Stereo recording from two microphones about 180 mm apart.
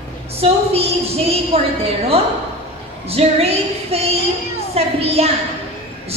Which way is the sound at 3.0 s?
35° right (ahead or behind).